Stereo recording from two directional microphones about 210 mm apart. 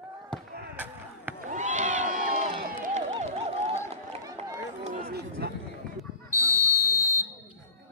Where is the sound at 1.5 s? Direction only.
35° right (ahead or behind).